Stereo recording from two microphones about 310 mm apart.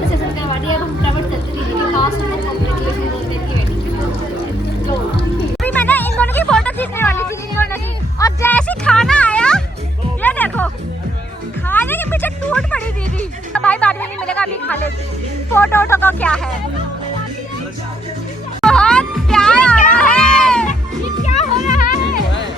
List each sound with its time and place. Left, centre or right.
5.6 s music: centre
11.7 s music: centre
15.5 s a sound: centre
18.6 s music: centre
20.0 s cat: centre
21.2 s music: left